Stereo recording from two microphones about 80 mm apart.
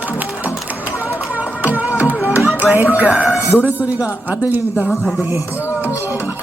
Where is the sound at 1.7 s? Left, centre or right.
Centre.